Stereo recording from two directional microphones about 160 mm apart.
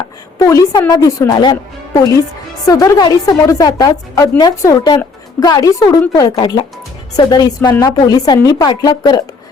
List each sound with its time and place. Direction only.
0.3 s a woman's voice: 20° left (ahead or behind)